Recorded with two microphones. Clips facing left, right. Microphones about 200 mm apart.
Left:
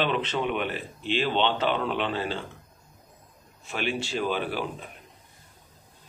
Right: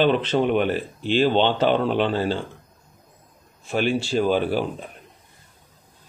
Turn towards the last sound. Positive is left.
turn(degrees=-35)  # may be behind; listen again after turning